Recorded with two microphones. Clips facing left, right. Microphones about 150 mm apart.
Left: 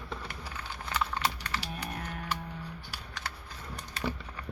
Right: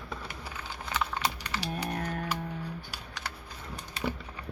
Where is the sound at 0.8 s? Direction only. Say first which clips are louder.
Even; 20° right (ahead or behind).